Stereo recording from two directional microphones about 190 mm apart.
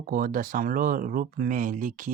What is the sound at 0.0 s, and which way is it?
Speech, 50° right (ahead or behind).